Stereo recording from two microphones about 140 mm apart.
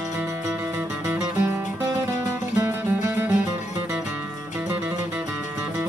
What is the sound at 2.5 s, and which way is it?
Music, 20° right (ahead or behind).